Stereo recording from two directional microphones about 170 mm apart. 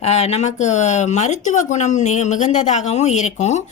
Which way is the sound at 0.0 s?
40° left (ahead or behind).